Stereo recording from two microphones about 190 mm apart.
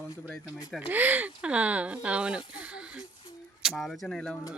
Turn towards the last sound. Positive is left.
turn(degrees=5)  # may be behind; listen again after turning